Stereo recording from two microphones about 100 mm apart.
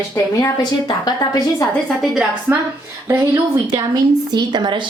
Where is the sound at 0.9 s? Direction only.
40° left (ahead or behind).